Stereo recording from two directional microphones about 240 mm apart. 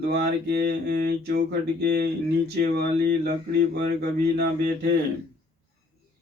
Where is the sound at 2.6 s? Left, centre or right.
Right.